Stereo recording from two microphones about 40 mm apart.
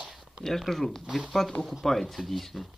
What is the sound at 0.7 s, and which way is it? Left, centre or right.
Speech, centre.